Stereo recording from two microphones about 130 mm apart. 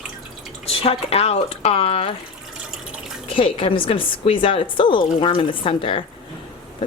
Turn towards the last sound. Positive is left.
turn(degrees=45)  # may be behind; listen again after turning